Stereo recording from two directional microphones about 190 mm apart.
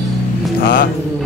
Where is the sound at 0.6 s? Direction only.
45° left (ahead or behind).